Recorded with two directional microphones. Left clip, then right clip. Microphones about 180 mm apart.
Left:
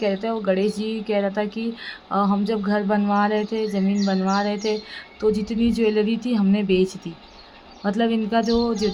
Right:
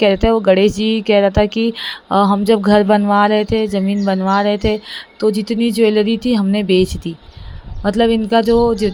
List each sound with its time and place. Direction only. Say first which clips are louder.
0.0 s speech: right 11 dB; 45° right (ahead or behind)